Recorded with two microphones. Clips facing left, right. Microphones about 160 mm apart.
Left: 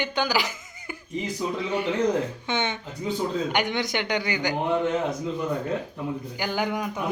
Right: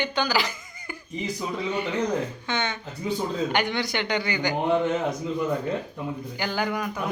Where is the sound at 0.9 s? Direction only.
15° left (ahead or behind).